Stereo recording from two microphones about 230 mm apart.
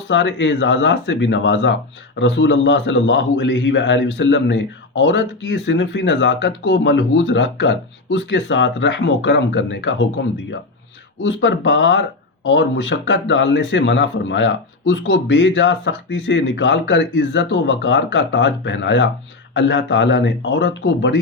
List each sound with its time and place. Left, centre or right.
0.1 s a man's voice: left